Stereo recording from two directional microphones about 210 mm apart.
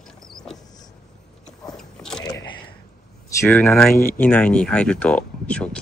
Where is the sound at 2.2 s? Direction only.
20° left (ahead or behind).